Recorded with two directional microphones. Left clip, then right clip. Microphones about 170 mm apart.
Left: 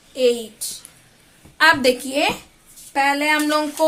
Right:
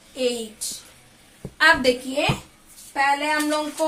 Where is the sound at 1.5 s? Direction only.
40° left (ahead or behind).